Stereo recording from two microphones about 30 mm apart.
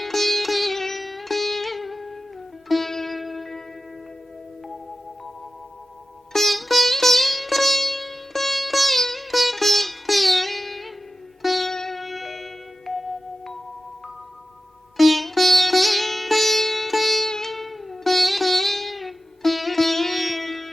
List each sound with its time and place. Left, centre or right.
0.0 s sitar: centre
6.3 s music: centre
11.7 s music: centre
11.9 s music: centre
14.9 s music: centre
17.2 s music: centre
17.5 s sitar: centre